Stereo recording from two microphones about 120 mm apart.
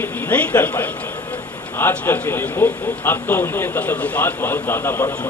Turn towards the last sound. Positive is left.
turn(degrees=15)  # may be behind; listen again after turning